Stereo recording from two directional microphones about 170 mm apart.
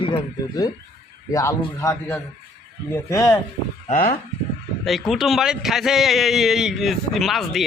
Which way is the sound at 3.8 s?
45° left (ahead or behind).